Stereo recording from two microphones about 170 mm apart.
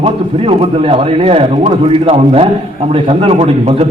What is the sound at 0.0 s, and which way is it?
A man's voice, 35° right (ahead or behind).